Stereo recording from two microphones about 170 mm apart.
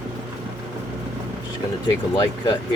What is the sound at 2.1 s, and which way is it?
Speech, 20° left (ahead or behind).